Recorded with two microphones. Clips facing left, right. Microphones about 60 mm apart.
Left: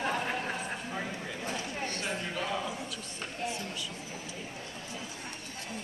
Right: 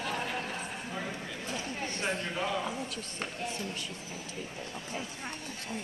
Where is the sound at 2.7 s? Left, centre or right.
Right.